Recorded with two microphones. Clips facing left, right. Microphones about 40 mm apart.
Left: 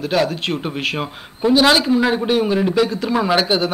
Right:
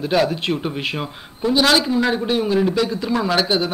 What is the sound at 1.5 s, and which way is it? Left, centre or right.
Speech, centre.